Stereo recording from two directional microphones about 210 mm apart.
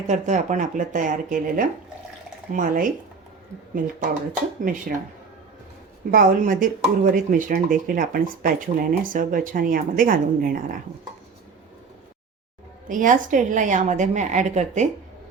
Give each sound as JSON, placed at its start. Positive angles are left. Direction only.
{"t": 0.1, "sound": "speech", "side_deg": -35}
{"t": 4.6, "sound": "speech", "side_deg": -40}
{"t": 6.1, "sound": "speech", "side_deg": -40}
{"t": 12.9, "sound": "speech", "side_deg": -40}